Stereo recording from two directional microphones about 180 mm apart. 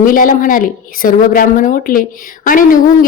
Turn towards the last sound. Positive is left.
turn(degrees=50)  # may be behind; listen again after turning